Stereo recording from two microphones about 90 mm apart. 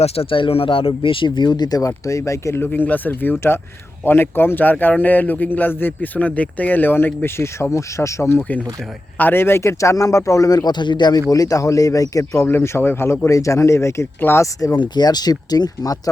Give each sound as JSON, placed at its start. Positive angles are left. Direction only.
{"t": 0.2, "sound": "speech", "side_deg": 80}
{"t": 2.0, "sound": "speech", "side_deg": 35}
{"t": 2.6, "sound": "speech", "side_deg": 20}
{"t": 9.1, "sound": "speech", "side_deg": 20}
{"t": 11.3, "sound": "speech", "side_deg": 40}
{"t": 12.5, "sound": "speech", "side_deg": 25}
{"t": 14.8, "sound": "speech", "side_deg": 50}